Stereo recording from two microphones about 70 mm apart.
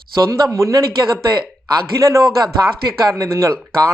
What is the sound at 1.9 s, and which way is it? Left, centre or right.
Speech, right.